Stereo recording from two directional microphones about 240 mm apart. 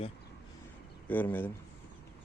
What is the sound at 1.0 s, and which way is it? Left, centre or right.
Speech, centre.